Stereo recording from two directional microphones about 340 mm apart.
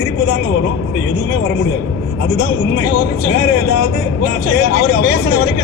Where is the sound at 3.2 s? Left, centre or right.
Left.